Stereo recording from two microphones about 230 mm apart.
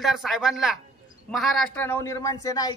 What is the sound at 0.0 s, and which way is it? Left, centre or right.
Speech, centre.